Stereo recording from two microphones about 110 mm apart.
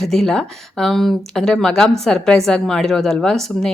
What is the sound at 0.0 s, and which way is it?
Speech, 5° left (ahead or behind).